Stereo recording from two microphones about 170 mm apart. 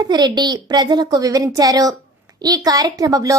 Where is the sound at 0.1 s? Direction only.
25° right (ahead or behind).